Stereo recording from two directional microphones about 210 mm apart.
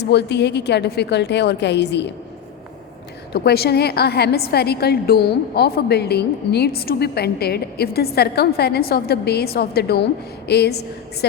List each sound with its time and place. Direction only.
0.0 s a woman's voice: 50° left (ahead or behind)
3.3 s a woman's voice: 50° left (ahead or behind)